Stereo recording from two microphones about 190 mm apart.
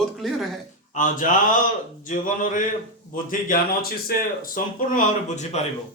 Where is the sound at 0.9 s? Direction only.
45° left (ahead or behind).